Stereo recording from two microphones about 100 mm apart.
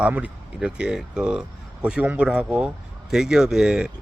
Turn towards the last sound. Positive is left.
turn(degrees=-5)  # may be behind; listen again after turning